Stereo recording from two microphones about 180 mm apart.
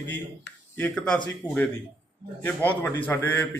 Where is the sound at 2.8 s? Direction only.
10° left (ahead or behind).